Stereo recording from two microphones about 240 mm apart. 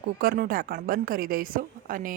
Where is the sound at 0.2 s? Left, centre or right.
Right.